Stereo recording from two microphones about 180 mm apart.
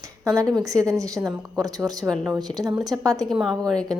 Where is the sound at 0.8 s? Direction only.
20° right (ahead or behind).